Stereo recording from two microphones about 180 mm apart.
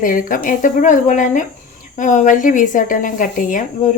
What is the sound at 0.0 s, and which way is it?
Speech, 50° left (ahead or behind).